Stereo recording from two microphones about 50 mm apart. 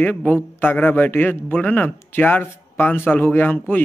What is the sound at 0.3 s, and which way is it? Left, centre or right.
A man's voice, left.